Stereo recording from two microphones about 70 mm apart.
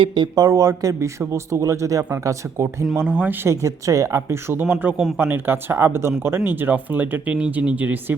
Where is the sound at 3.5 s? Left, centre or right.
Right.